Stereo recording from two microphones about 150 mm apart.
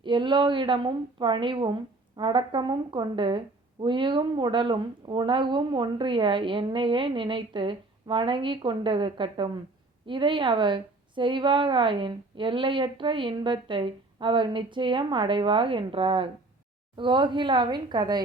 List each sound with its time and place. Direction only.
0.0 s speech: 30° right (ahead or behind)